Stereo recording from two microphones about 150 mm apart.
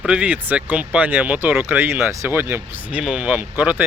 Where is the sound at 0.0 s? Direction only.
5° right (ahead or behind).